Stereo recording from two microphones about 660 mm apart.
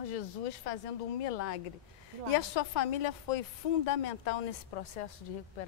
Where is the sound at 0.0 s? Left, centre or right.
Left.